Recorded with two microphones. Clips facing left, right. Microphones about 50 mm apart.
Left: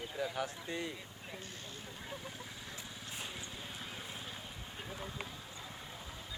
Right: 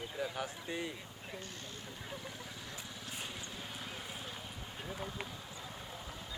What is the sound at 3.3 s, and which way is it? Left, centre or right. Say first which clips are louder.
Clip-clop: right 1 dB; left.